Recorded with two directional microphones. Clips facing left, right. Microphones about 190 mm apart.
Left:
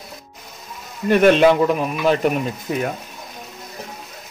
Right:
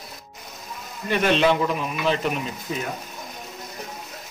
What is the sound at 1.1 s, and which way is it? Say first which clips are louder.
Speech: left 7 dB; 50° left (ahead or behind).